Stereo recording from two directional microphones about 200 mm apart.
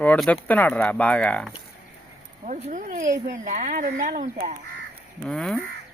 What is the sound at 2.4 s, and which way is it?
Speech, 40° right (ahead or behind).